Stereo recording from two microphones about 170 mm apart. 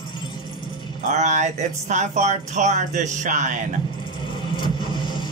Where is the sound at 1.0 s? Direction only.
45° right (ahead or behind).